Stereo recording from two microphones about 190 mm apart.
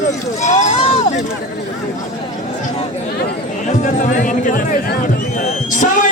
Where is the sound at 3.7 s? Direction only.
40° left (ahead or behind).